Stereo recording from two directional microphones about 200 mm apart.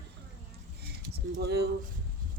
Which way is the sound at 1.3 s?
50° right (ahead or behind).